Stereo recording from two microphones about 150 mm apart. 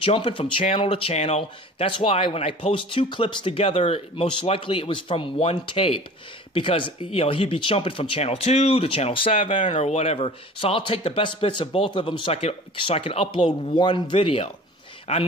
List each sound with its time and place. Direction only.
0.0 s speech: 35° left (ahead or behind)
9.5 s speech: 55° left (ahead or behind)